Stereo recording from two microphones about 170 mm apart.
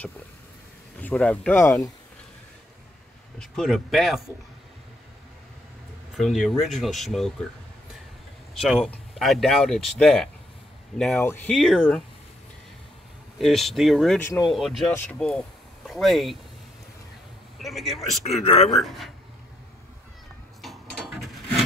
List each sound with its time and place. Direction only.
1.0 s speech: 5° left (ahead or behind)
3.3 s speech: centre (ahead or behind)
6.1 s speech: centre (ahead or behind)
8.5 s speech: centre (ahead or behind)
13.4 s speech: centre (ahead or behind)
17.6 s a man's voice: centre (ahead or behind)
18.2 s speech: 35° left (ahead or behind)
18.8 s speech: centre (ahead or behind)
20.6 s mechanisms: centre (ahead or behind)